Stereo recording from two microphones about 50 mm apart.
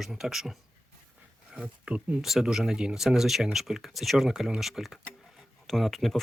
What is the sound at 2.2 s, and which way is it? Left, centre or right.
Speech, centre.